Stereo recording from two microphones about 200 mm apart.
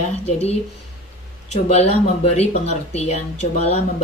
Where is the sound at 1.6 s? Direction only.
30° left (ahead or behind).